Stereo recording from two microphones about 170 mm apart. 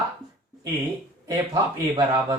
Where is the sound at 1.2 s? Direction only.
20° right (ahead or behind).